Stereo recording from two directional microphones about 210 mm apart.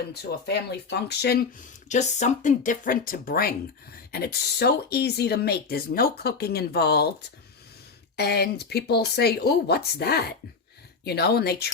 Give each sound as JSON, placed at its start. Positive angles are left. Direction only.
{"t": 0.1, "sound": "speech", "side_deg": 50}
{"t": 1.9, "sound": "speech", "side_deg": 35}